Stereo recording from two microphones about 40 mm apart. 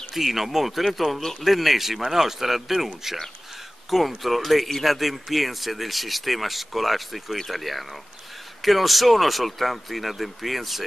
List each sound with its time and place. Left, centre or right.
0.1 s speech: centre
4.2 s speech: centre